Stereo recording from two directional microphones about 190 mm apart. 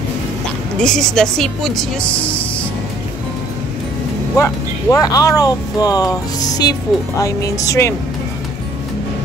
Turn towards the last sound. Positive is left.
turn(degrees=15)  # may be behind; listen again after turning